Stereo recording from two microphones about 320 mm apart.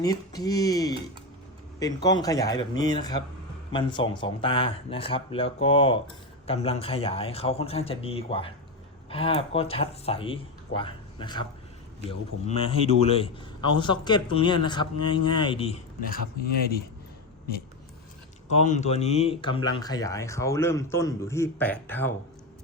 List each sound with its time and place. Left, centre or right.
0.0 s a man's voice: centre
18.6 s a man's voice: left; by 22.1 s centre